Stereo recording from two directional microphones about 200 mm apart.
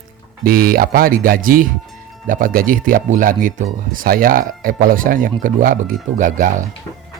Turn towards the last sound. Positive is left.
turn(degrees=-40)  # may be behind; listen again after turning